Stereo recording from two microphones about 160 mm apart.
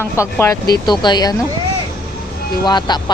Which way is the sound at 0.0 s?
15° left (ahead or behind).